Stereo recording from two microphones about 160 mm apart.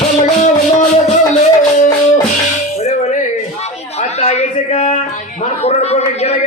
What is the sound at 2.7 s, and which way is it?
Music, 45° left (ahead or behind).